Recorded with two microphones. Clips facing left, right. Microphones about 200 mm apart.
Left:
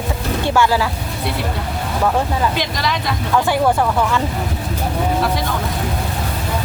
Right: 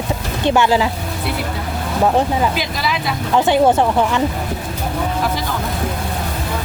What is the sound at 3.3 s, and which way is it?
Speech, 20° right (ahead or behind).